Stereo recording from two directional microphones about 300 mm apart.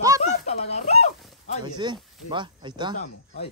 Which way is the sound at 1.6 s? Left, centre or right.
Centre.